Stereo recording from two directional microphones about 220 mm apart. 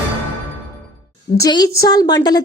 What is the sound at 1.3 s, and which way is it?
A woman's voice, 15° left (ahead or behind).